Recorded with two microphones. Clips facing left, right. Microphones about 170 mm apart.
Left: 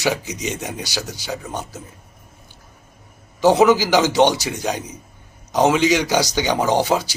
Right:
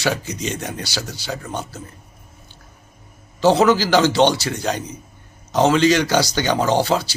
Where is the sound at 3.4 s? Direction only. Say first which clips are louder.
Left 1 dB; 15° left (ahead or behind).